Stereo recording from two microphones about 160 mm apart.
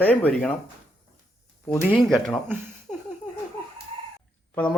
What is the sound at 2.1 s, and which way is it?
Speech, 5° left (ahead or behind).